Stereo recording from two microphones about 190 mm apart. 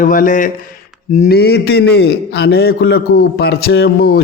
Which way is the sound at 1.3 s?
55° left (ahead or behind).